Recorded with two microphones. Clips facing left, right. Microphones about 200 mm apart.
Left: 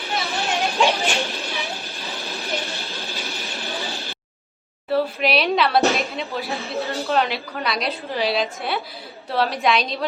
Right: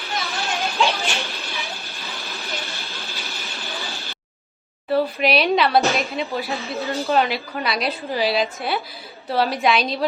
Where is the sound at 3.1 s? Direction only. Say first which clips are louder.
Left 3 dB; 15° left (ahead or behind).